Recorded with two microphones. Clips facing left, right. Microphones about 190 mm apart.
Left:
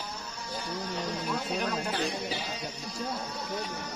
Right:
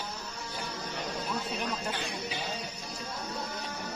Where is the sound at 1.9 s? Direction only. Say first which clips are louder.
Left 4 dB; 35° left (ahead or behind).